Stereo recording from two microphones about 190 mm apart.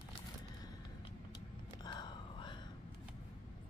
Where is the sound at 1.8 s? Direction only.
20° left (ahead or behind).